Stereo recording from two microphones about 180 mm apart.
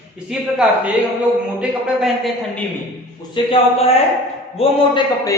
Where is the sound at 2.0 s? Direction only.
Centre (ahead or behind).